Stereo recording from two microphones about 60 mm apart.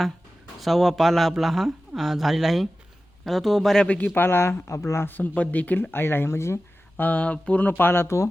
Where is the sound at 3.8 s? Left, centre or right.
Left.